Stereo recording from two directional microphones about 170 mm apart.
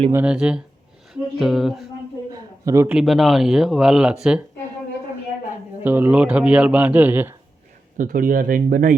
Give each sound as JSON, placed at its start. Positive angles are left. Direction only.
{"t": 0.1, "sound": "speech", "side_deg": -10}
{"t": 1.1, "sound": "a sound", "side_deg": 0}
{"t": 2.3, "sound": "a sound", "side_deg": -20}
{"t": 2.9, "sound": "speech", "side_deg": 0}
{"t": 5.8, "sound": "a man's voice", "side_deg": -10}
{"t": 7.9, "sound": "speech", "side_deg": -50}